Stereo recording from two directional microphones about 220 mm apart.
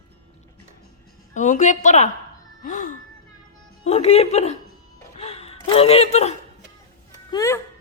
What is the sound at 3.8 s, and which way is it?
Speech, 30° left (ahead or behind).